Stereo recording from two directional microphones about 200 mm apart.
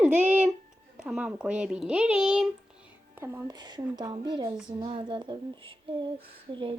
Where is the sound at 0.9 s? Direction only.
5° right (ahead or behind).